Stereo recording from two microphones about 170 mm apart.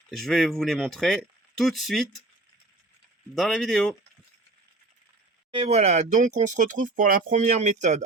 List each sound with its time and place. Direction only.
0.2 s speech: 5° left (ahead or behind)
3.3 s speech: centre (ahead or behind)
5.5 s speech: 35° right (ahead or behind)